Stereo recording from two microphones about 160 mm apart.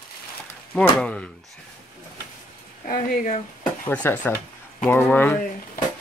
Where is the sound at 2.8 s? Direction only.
55° left (ahead or behind).